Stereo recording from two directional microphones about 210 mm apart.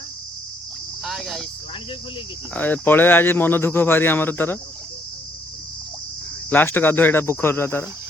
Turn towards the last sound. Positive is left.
turn(degrees=10)  # may be behind; listen again after turning